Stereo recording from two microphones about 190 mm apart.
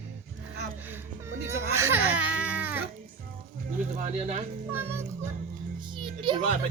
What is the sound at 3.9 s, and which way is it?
Speech, 40° right (ahead or behind).